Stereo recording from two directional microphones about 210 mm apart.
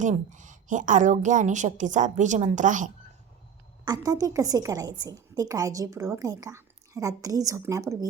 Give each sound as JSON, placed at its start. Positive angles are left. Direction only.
{"t": 0.0, "sound": "a woman's voice", "side_deg": -35}
{"t": 3.8, "sound": "a woman's voice", "side_deg": -20}